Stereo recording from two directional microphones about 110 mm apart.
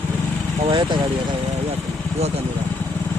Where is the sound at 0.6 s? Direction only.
45° right (ahead or behind).